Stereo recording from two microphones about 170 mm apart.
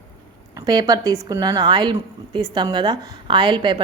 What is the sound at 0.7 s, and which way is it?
A woman's voice, 25° right (ahead or behind).